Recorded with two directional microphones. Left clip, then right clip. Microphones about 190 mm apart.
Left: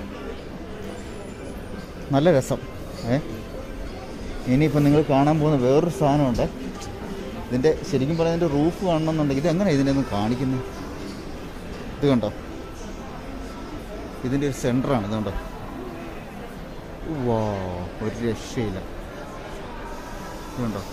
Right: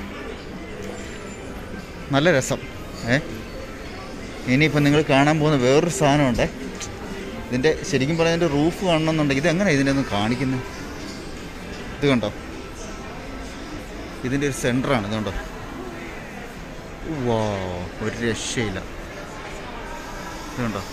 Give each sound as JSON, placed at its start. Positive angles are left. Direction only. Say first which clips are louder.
{"t": 2.1, "sound": "speech", "louder": "even", "side_deg": 15}
{"t": 4.5, "sound": "speech", "louder": "right 2 dB", "side_deg": 15}
{"t": 7.9, "sound": "speech", "louder": "right 2 dB", "side_deg": 0}
{"t": 12.0, "sound": "speech", "louder": "right 1 dB", "side_deg": 15}
{"t": 14.3, "sound": "speech", "louder": "right 1 dB", "side_deg": 10}
{"t": 17.3, "sound": "speech", "louder": "right 2 dB", "side_deg": 5}